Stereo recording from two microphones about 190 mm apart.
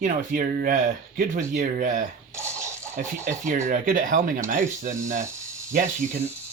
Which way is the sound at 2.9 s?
40° right (ahead or behind).